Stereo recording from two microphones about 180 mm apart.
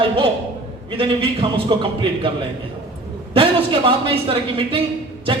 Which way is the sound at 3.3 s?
30° right (ahead or behind).